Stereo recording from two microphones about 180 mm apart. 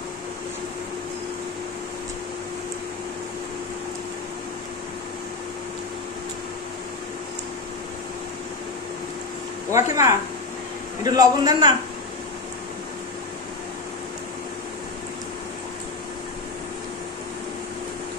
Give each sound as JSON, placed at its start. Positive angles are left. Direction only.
{"t": 9.7, "sound": "a man's voice", "side_deg": -15}